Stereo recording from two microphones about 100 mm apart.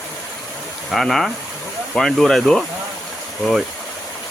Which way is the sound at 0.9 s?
Centre (ahead or behind).